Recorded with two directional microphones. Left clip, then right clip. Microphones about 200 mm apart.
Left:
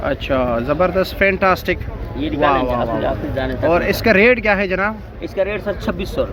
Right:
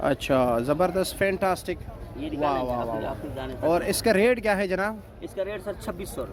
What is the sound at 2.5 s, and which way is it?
Speech, 20° right (ahead or behind).